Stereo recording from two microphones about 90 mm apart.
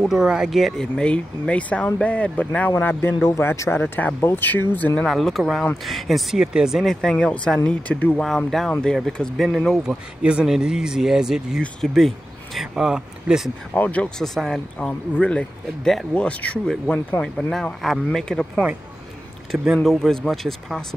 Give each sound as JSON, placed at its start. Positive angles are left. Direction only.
{"t": 0.0, "sound": "speech", "side_deg": -5}
{"t": 0.9, "sound": "speech", "side_deg": 10}
{"t": 2.7, "sound": "speech", "side_deg": 25}
{"t": 3.8, "sound": "speech", "side_deg": 20}
{"t": 5.0, "sound": "speech", "side_deg": 0}
{"t": 8.5, "sound": "speech", "side_deg": 5}
{"t": 9.8, "sound": "speech", "side_deg": -10}
{"t": 11.6, "sound": "speech", "side_deg": 5}
{"t": 12.5, "sound": "speech", "side_deg": -5}
{"t": 13.7, "sound": "speech", "side_deg": 15}
{"t": 14.8, "sound": "speech", "side_deg": 15}
{"t": 19.6, "sound": "speech", "side_deg": -5}